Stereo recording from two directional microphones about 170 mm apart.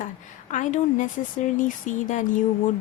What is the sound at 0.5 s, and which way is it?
Speech, 50° left (ahead or behind).